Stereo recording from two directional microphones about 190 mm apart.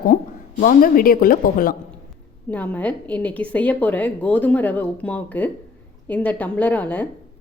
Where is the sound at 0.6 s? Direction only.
45° left (ahead or behind).